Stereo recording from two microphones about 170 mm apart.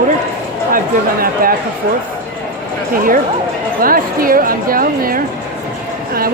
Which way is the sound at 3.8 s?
55° right (ahead or behind).